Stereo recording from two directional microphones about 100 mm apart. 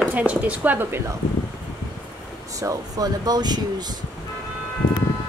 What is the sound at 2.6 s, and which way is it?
Speech, 35° right (ahead or behind).